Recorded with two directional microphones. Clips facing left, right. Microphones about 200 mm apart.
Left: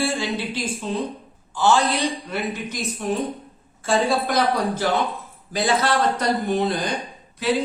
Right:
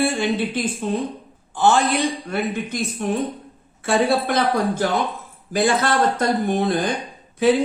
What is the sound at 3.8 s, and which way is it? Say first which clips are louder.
A woman's voice: right 2 dB; 60° right (ahead or behind).